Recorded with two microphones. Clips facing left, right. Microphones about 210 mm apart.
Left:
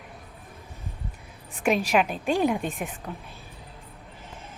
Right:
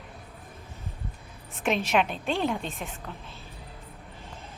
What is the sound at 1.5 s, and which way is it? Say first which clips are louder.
Speech: left 3 dB; centre (ahead or behind).